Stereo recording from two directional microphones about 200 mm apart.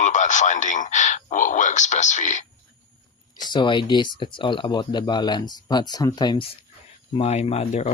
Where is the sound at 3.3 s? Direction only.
20° left (ahead or behind).